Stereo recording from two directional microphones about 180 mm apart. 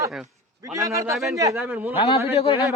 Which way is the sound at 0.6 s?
20° right (ahead or behind).